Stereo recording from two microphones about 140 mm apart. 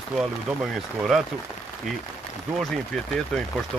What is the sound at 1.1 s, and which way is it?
Speech, centre (ahead or behind).